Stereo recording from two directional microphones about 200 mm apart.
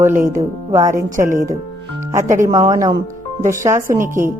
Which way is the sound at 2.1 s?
15° right (ahead or behind).